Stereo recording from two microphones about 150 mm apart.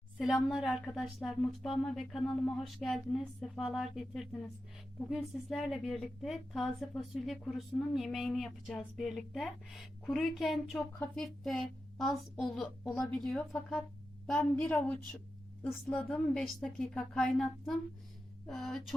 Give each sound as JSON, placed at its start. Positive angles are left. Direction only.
{"t": 0.2, "sound": "a woman's voice", "side_deg": 0}